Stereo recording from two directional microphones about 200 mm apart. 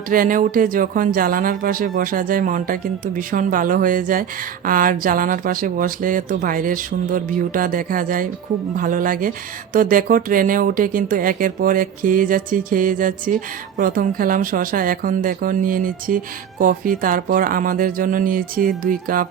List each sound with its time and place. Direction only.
0.1 s speech: 45° right (ahead or behind)